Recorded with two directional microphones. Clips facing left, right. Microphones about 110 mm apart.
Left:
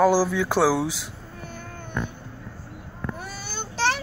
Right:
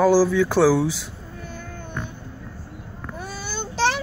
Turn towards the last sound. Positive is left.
turn(degrees=-20)  # may be behind; listen again after turning